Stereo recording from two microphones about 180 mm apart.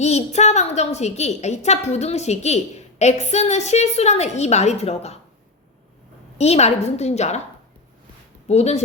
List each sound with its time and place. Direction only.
0.0 s a woman's voice: 40° left (ahead or behind)
6.3 s a woman's voice: 35° left (ahead or behind)
8.4 s a woman's voice: 35° left (ahead or behind)